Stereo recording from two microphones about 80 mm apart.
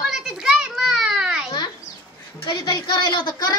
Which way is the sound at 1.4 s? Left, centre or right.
Left.